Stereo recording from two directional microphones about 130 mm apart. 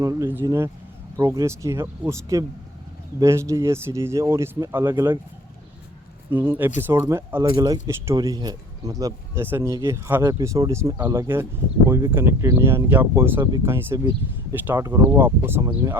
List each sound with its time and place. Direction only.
0.0 s speech: 25° right (ahead or behind)
6.3 s speech: 15° right (ahead or behind)